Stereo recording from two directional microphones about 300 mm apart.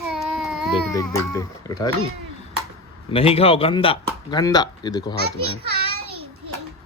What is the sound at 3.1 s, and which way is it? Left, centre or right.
A man's voice, centre.